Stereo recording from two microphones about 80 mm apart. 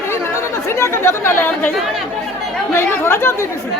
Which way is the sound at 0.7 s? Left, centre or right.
Left.